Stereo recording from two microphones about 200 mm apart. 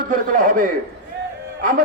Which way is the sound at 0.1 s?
45° right (ahead or behind).